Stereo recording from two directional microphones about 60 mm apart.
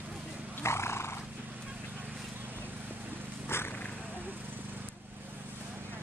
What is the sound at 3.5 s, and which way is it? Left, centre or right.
Purr, left.